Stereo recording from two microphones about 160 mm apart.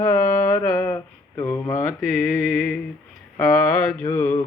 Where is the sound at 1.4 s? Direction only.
15° left (ahead or behind).